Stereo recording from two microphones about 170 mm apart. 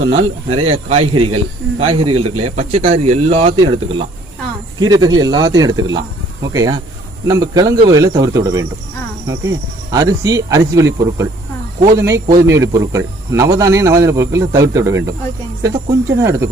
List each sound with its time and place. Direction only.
0.1 s speech: 35° right (ahead or behind); by 16.5 s 15° right (ahead or behind)